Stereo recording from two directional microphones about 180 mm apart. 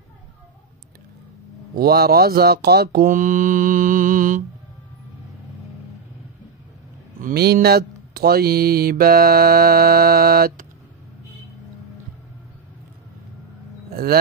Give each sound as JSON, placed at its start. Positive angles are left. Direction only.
{"t": 1.8, "sound": "speech", "side_deg": -60}
{"t": 7.2, "sound": "speech", "side_deg": -55}